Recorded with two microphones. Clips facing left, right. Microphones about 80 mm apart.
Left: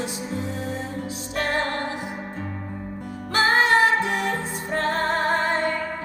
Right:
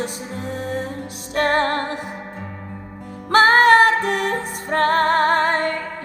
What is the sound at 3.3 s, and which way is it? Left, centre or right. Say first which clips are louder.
Music: right 7 dB; right.